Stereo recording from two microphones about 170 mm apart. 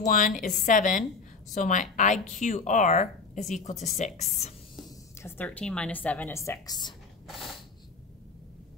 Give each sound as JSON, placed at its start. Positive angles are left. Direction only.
{"t": 0.1, "sound": "a woman's voice", "side_deg": 50}
{"t": 4.8, "sound": "speech", "side_deg": 15}